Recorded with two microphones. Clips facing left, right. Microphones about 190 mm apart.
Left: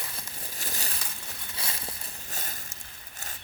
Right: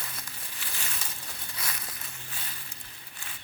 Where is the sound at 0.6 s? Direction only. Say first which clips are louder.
Left 4 dB; 40° left (ahead or behind).